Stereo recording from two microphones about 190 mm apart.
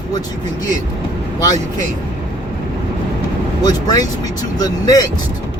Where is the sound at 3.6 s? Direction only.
20° left (ahead or behind).